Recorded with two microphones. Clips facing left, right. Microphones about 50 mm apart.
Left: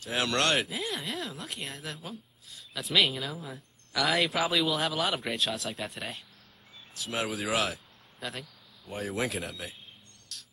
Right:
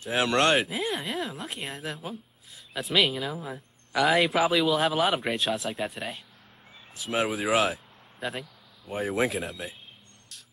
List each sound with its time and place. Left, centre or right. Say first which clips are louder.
0.1 s speech: right 5 dB; centre
8.2 s a sound: right 5 dB; centre
9.2 s speech: right 5 dB; centre